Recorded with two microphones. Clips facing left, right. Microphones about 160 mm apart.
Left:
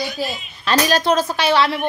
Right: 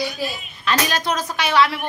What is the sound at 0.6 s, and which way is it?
A woman's voice, 35° left (ahead or behind).